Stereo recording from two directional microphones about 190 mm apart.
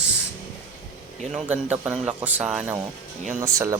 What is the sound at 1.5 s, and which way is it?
Speech, 10° right (ahead or behind).